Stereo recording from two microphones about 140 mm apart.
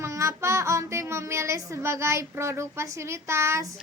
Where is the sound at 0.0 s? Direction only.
20° right (ahead or behind).